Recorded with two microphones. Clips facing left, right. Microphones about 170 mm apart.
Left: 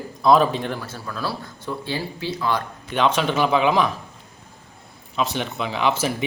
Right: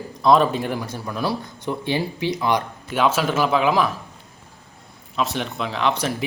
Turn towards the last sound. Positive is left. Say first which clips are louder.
# even
turn(degrees=0)  # may be behind; listen again after turning